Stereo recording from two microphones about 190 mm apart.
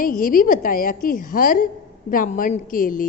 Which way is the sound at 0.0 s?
50° left (ahead or behind).